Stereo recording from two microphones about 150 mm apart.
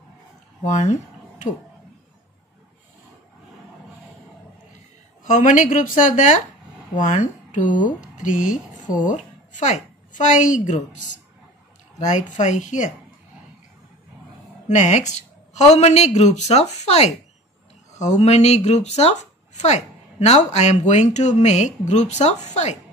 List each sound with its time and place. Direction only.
0.7 s a sound: 50° left (ahead or behind)
5.2 s a woman's voice: 55° left (ahead or behind)
14.7 s speech: 50° left (ahead or behind)